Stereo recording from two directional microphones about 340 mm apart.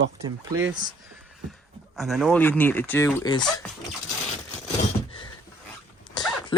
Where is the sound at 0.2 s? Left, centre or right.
Centre.